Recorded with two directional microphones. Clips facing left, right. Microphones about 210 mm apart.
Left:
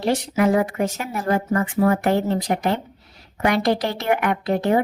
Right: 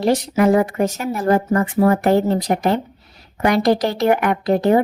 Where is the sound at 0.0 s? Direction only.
40° right (ahead or behind).